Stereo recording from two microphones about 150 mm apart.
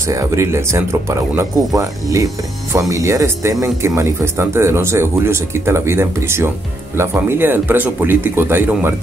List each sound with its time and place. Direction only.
0.0 s speech: 20° right (ahead or behind)